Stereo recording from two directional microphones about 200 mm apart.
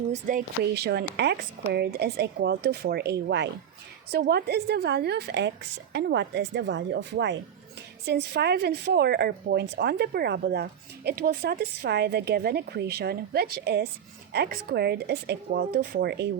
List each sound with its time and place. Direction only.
0.1 s a woman's voice: 40° right (ahead or behind)